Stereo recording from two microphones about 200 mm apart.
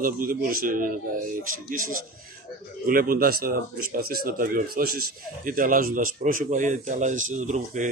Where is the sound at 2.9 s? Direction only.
45° right (ahead or behind).